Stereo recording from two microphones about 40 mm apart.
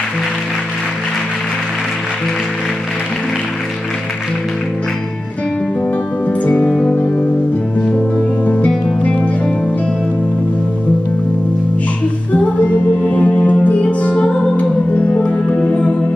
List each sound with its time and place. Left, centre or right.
6.2 s music: left
6.7 s music: centre
8.5 s music: left
12.3 s music: left